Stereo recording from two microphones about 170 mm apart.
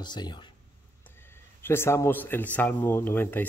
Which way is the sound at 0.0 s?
25° left (ahead or behind).